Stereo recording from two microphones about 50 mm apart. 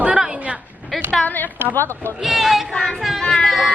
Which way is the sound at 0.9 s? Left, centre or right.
Centre.